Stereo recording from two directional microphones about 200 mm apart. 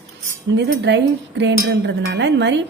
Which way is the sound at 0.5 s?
60° right (ahead or behind).